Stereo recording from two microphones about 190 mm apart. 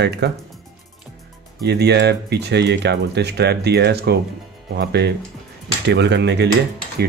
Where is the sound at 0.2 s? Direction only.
60° right (ahead or behind).